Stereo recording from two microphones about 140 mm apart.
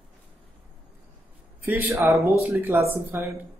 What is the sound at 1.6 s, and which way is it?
Speech, 15° right (ahead or behind).